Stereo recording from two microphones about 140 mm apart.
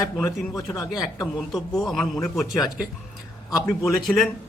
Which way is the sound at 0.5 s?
25° left (ahead or behind).